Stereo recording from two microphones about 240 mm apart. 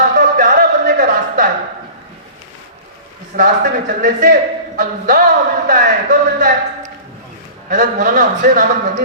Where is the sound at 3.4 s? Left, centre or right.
Right.